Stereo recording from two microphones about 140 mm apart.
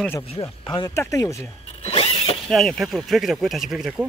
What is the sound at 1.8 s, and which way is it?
Zipper, 45° left (ahead or behind).